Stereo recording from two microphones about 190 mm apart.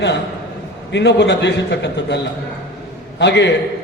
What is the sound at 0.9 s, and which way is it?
A man's voice, 65° left (ahead or behind).